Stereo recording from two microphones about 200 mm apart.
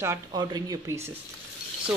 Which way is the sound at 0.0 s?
15° right (ahead or behind).